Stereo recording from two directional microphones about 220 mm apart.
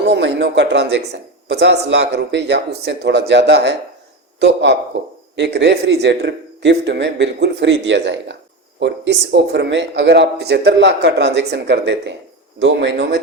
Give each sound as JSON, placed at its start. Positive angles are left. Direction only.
{"t": 0.1, "sound": "speech", "side_deg": -50}